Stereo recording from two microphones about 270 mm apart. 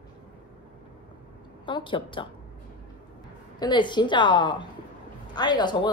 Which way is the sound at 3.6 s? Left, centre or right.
Centre.